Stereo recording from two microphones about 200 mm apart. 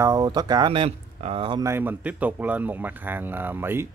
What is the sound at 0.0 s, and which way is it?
Speech, 20° right (ahead or behind).